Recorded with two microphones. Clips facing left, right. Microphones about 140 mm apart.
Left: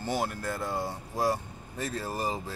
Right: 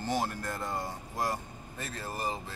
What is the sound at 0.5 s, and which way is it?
Speech, 5° left (ahead or behind).